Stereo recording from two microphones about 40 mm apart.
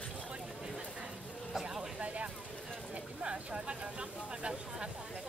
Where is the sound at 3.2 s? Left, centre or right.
Right.